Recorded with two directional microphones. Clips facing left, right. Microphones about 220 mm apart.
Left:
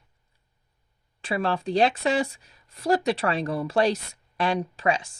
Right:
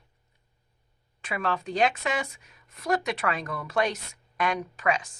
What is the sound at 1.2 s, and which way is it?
A woman's voice, 30° left (ahead or behind).